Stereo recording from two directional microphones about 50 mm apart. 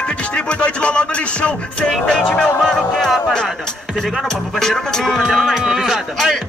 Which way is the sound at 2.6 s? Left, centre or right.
Centre.